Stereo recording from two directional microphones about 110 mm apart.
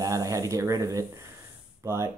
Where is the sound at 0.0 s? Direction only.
30° right (ahead or behind).